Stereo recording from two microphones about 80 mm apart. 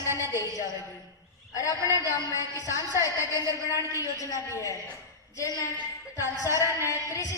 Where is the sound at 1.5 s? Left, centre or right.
Left.